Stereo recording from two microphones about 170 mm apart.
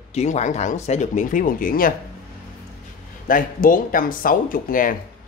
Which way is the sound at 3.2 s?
55° left (ahead or behind).